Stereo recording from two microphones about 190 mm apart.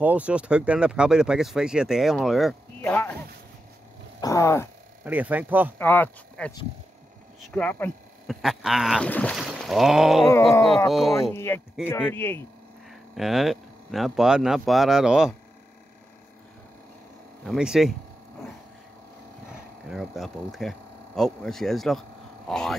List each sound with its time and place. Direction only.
0.0 s speech: 5° right (ahead or behind); by 3.2 s 10° left (ahead or behind)
4.2 s speech: 15° left (ahead or behind)
5.0 s speech: 10° right (ahead or behind)
5.8 s speech: 10° left (ahead or behind)
7.5 s speech: 5° left (ahead or behind)
10.2 s speech: 15° left (ahead or behind)
10.9 s speech: centre (ahead or behind)
11.3 s speech: 10° left (ahead or behind)
13.1 s speech: centre (ahead or behind)
17.5 s speech: centre (ahead or behind)
19.9 s speech: centre (ahead or behind)